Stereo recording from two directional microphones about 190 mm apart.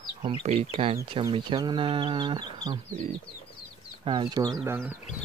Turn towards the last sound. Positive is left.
turn(degrees=-15)  # may be behind; listen again after turning